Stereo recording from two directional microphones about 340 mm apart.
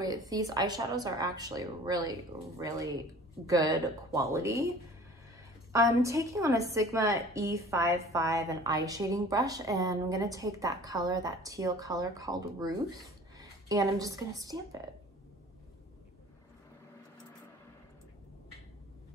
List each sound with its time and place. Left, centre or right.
0.0 s a woman's voice: centre
5.7 s a woman's voice: centre